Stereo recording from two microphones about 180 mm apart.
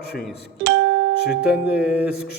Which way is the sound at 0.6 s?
70° right (ahead or behind).